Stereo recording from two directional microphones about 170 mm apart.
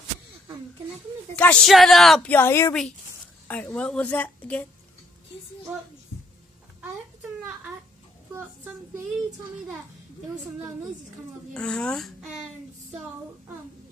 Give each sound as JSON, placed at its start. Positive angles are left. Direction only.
{"t": 1.3, "sound": "a woman's voice", "side_deg": 5}
{"t": 6.8, "sound": "a sound", "side_deg": -5}
{"t": 11.5, "sound": "a woman's voice", "side_deg": 5}